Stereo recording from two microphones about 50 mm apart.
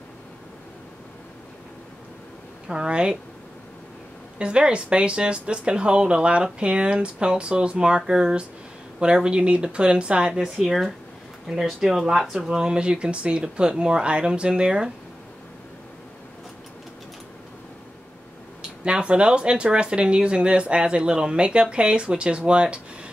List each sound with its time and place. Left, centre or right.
2.7 s speech: centre
4.4 s speech: right
10.6 s speech: centre
18.9 s speech: right